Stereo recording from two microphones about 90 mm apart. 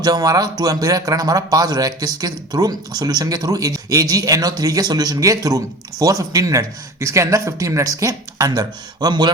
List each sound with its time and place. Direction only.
0.0 s speech: 45° right (ahead or behind)